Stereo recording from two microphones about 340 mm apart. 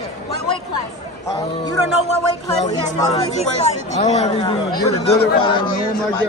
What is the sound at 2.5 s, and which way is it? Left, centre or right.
Speech, centre.